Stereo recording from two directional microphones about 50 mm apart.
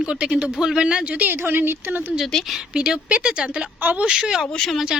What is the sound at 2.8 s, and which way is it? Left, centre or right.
A woman's voice, right.